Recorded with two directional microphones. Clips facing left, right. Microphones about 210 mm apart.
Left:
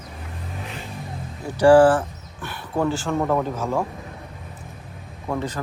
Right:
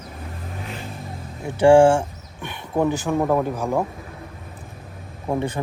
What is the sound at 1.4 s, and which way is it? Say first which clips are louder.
Speech: even; 25° right (ahead or behind).